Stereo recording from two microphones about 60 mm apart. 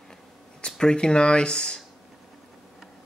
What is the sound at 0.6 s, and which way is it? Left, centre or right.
Speech, centre.